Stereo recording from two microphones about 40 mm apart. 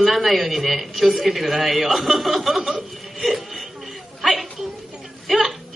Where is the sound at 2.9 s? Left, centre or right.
Centre.